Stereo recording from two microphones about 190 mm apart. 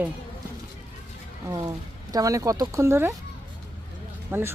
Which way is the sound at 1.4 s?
20° right (ahead or behind).